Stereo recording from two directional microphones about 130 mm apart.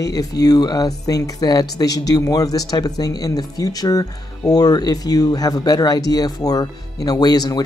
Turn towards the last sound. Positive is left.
turn(degrees=30)  # may be behind; listen again after turning